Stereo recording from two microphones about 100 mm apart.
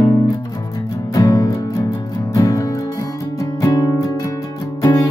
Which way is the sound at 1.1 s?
40° left (ahead or behind).